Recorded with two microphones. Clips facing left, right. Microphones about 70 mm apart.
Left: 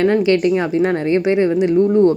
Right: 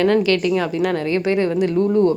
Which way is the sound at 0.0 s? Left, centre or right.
Left.